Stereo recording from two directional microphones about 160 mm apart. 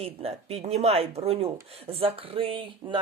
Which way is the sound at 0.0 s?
40° right (ahead or behind).